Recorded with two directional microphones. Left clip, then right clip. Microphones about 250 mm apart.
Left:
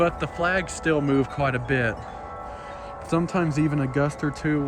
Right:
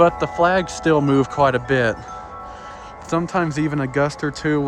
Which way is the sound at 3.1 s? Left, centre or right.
Centre.